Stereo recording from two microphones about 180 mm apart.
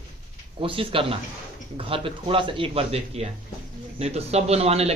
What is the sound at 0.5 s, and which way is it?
Speech, 30° right (ahead or behind).